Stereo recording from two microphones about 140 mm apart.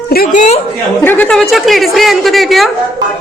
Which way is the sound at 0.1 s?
90° left.